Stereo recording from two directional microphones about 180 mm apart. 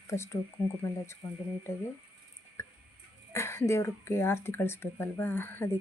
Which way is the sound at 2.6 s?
15° left (ahead or behind).